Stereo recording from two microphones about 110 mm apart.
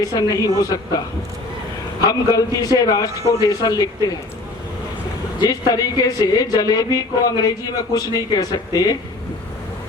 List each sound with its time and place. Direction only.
0.0 s a man's voice: 35° left (ahead or behind)
5.4 s a man's voice: 35° left (ahead or behind)